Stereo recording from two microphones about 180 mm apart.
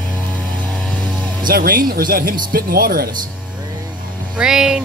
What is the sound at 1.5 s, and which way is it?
Speech, 55° right (ahead or behind).